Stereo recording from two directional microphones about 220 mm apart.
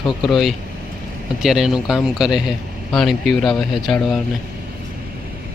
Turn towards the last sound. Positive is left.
turn(degrees=0)  # may be behind; listen again after turning